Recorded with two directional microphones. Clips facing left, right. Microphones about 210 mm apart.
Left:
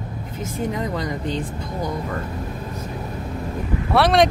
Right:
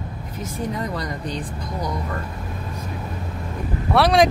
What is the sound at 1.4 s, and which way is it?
Speech, 25° left (ahead or behind).